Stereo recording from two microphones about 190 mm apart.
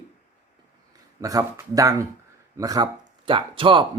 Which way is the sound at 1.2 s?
20° right (ahead or behind).